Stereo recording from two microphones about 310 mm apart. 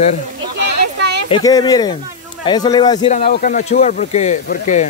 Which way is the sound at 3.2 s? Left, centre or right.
Left.